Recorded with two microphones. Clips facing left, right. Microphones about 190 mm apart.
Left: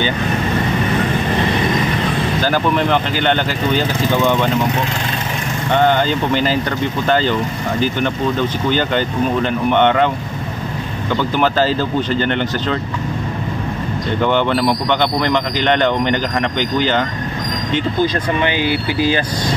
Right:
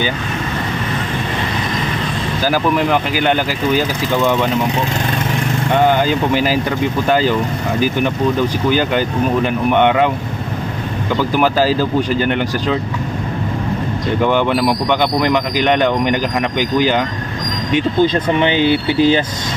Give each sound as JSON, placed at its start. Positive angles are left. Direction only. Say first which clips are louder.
{"t": 2.4, "sound": "speech", "louder": "right 3 dB", "side_deg": -5}
{"t": 5.9, "sound": "speech", "louder": "right 1 dB", "side_deg": -10}
{"t": 11.1, "sound": "speech", "louder": "right 1 dB", "side_deg": -10}
{"t": 14.2, "sound": "speech", "louder": "right 1 dB", "side_deg": -10}
{"t": 17.7, "sound": "speech", "louder": "right 4 dB", "side_deg": -20}